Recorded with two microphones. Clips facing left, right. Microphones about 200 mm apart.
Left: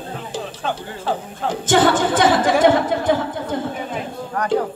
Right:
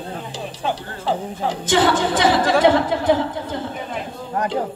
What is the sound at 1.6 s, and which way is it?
Speech, 50° left (ahead or behind).